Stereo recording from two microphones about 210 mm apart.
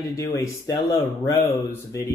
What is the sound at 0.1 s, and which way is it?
Speech, 15° left (ahead or behind).